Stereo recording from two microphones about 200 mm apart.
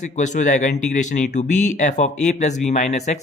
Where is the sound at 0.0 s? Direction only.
40° left (ahead or behind).